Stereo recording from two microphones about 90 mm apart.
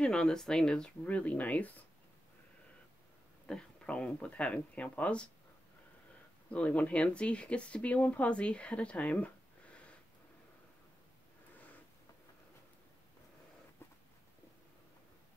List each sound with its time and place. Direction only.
0.0 s speech: 10° left (ahead or behind)
3.4 s speech: 10° left (ahead or behind)
6.5 s speech: 15° left (ahead or behind)